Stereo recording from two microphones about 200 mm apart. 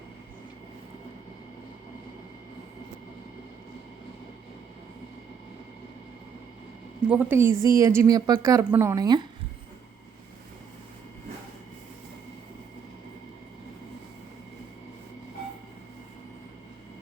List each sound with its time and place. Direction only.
7.1 s speech: 10° right (ahead or behind)